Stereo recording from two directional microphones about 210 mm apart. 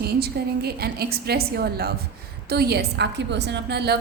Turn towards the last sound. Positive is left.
turn(degrees=-50)  # may be behind; listen again after turning